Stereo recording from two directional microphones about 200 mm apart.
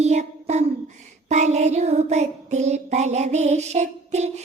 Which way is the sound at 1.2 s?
35° right (ahead or behind).